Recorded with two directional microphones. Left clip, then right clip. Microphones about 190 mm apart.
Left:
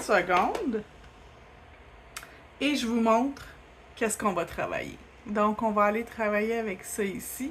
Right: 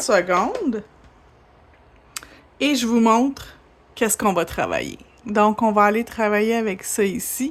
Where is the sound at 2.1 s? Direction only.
55° right (ahead or behind).